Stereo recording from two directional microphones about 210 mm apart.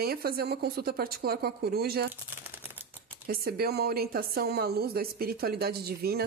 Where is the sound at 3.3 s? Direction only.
45° right (ahead or behind).